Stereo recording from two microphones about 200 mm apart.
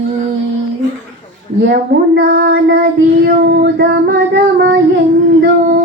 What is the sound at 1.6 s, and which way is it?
Child singing, 60° right (ahead or behind).